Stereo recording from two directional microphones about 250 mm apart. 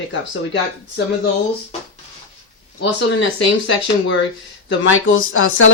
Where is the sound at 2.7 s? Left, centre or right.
Left.